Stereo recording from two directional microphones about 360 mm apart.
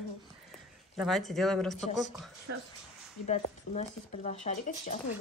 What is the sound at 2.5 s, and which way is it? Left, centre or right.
Speech, right.